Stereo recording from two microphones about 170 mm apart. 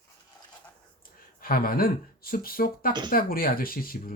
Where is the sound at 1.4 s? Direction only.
60° left (ahead or behind).